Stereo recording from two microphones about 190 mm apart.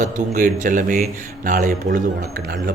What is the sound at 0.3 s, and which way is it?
A man's voice, 45° right (ahead or behind).